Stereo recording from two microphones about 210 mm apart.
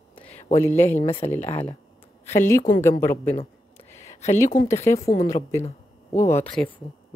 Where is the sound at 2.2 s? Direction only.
10° left (ahead or behind).